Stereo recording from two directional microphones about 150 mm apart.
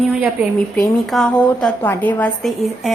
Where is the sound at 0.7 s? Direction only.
Centre (ahead or behind).